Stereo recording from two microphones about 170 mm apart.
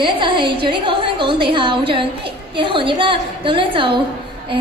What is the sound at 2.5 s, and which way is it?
A woman's voice, 30° right (ahead or behind).